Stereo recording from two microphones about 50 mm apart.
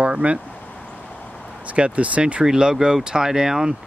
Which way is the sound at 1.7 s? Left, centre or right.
Right.